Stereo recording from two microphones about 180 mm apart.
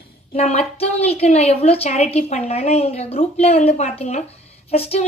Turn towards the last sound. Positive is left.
turn(degrees=35)  # may be behind; listen again after turning